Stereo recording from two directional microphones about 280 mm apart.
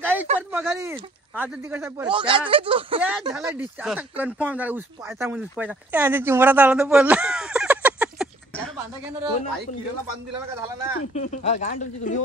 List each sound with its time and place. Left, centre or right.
0.0 s a sound: centre
0.4 s speech: centre
10.5 s speech: centre
11.1 s speech: left